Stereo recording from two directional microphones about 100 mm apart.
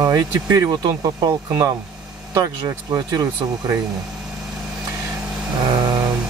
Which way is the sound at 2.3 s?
35° right (ahead or behind).